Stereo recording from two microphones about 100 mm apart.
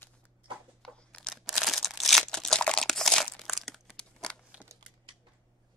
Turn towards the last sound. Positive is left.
turn(degrees=-10)  # may be behind; listen again after turning